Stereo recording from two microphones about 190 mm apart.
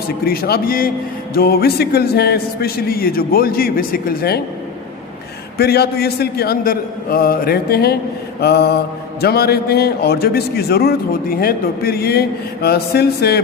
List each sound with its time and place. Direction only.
0.3 s speech: 55° left (ahead or behind)
5.5 s a man's voice: 55° left (ahead or behind)